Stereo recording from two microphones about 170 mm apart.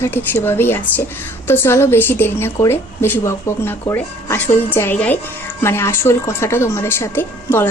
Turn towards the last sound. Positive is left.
turn(degrees=10)  # may be behind; listen again after turning